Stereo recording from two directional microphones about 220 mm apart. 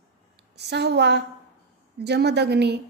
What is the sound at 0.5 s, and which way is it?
A woman's voice, 50° right (ahead or behind).